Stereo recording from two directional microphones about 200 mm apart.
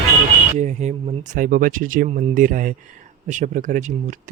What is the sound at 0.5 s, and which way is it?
Speech, 35° right (ahead or behind).